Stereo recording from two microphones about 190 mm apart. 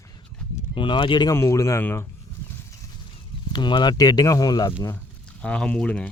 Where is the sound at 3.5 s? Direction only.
25° left (ahead or behind).